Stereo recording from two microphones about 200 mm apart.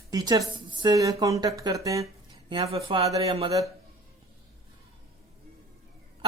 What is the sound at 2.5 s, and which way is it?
Speech, 30° right (ahead or behind).